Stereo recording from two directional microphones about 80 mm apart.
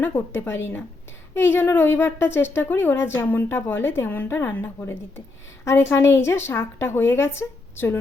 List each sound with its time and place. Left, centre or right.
0.0 s a woman's voice: left